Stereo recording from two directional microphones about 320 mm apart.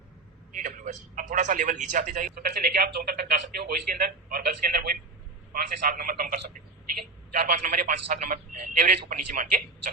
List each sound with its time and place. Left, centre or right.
0.5 s a man's voice: right